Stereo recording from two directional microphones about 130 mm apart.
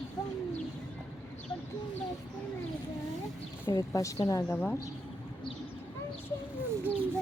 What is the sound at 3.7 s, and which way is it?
Speech, 25° left (ahead or behind).